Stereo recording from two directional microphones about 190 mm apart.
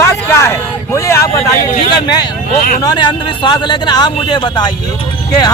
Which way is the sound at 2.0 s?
20° left (ahead or behind).